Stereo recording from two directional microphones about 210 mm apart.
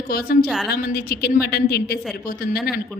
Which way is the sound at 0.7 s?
45° left (ahead or behind).